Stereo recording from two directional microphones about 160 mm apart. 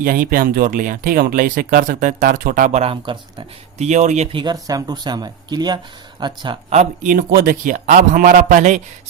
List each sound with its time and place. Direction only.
0.0 s speech: 65° right (ahead or behind)
2.8 s speech: 30° right (ahead or behind)
3.8 s speech: 45° right (ahead or behind); by 6.6 s 30° right (ahead or behind)
6.7 s speech: 50° right (ahead or behind)
7.3 s speech: 65° right (ahead or behind)